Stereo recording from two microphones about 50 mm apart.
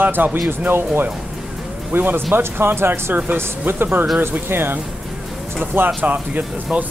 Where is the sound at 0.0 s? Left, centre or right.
Right.